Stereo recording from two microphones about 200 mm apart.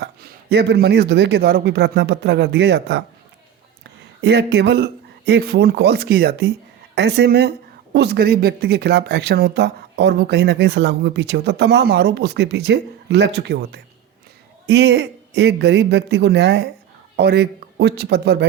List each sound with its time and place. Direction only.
0.0 s speech: 55° right (ahead or behind)
4.2 s speech: 55° right (ahead or behind)